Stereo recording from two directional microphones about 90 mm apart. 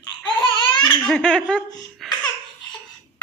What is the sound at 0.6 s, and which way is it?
Laughter, 55° left (ahead or behind).